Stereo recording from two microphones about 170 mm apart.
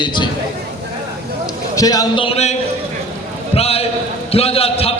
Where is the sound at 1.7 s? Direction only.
20° left (ahead or behind).